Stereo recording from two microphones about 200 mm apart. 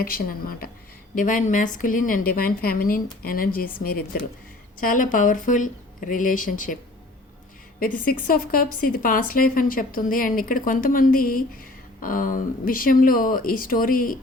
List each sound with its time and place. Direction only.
0.0 s a woman's voice: 45° left (ahead or behind)
4.8 s speech: 45° left (ahead or behind)
7.8 s a woman's voice: 45° left (ahead or behind)